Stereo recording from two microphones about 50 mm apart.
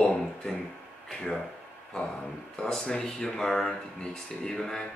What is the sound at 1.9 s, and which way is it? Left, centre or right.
Speech, centre.